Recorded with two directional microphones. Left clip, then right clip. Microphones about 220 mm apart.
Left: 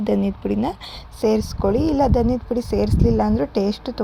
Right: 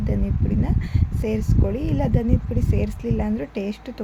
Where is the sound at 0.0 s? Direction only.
30° left (ahead or behind).